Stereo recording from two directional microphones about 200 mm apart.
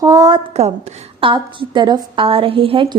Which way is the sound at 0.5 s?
30° right (ahead or behind).